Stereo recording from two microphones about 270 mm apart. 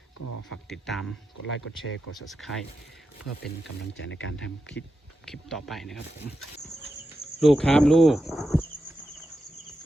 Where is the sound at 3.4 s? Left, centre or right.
Left.